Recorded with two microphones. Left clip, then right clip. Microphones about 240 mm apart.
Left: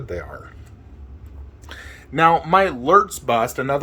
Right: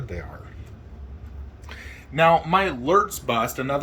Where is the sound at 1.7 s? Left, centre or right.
Left.